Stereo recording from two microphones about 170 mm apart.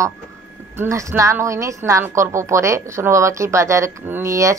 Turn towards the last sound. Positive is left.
turn(degrees=-15)  # may be behind; listen again after turning